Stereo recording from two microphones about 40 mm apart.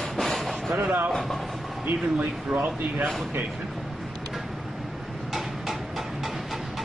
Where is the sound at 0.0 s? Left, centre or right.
Centre.